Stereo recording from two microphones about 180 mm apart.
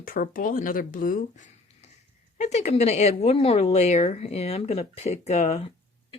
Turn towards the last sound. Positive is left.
turn(degrees=40)  # may be behind; listen again after turning